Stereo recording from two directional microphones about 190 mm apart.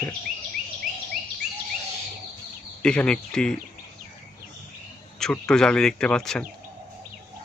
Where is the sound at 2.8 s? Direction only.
5° left (ahead or behind).